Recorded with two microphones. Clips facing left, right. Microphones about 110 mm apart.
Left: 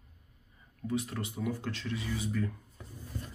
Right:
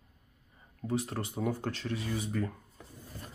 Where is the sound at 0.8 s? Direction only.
35° right (ahead or behind).